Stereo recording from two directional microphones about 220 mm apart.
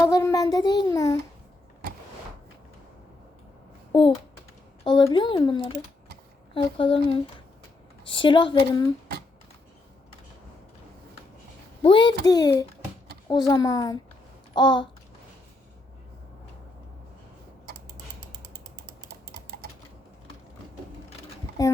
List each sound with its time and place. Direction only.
0.0 s a child's voice: 15° left (ahead or behind)
3.9 s speech: 25° left (ahead or behind)
11.8 s a child's voice: 20° left (ahead or behind)
19.0 s typing: 45° right (ahead or behind)
21.6 s a child's voice: 15° left (ahead or behind)